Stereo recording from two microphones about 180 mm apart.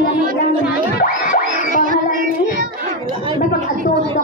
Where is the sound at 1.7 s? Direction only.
50° right (ahead or behind).